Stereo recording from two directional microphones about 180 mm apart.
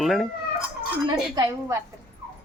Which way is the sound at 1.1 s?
20° right (ahead or behind).